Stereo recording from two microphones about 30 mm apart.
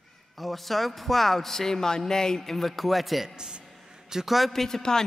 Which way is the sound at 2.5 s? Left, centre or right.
Centre.